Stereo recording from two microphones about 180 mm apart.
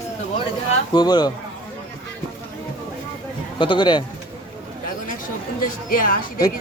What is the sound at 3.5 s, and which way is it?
Speech, 25° left (ahead or behind).